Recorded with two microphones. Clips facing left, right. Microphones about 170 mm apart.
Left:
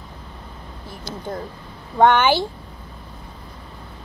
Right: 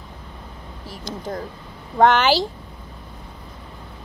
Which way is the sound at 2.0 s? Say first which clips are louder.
Even; 85° right.